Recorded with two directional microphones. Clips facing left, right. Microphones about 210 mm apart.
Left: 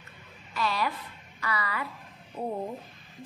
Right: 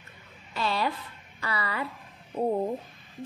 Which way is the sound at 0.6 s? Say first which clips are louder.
Right 1 dB; 30° right (ahead or behind).